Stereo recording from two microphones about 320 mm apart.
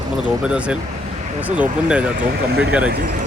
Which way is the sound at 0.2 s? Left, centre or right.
Centre.